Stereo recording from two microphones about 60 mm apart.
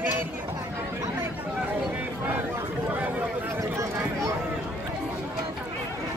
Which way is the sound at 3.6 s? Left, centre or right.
Right.